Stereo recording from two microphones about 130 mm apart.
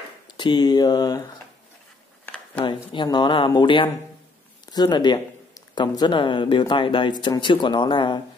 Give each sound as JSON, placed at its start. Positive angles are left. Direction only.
{"t": 0.4, "sound": "speech", "side_deg": 35}
{"t": 2.2, "sound": "a sound", "side_deg": 10}
{"t": 2.6, "sound": "speech", "side_deg": 40}